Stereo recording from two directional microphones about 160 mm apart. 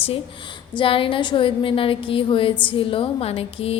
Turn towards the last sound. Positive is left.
turn(degrees=35)  # may be behind; listen again after turning